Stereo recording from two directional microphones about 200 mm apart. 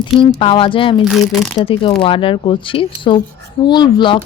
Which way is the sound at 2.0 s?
25° left (ahead or behind).